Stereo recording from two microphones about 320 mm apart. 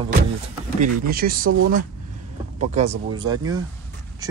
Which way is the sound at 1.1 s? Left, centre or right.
Right.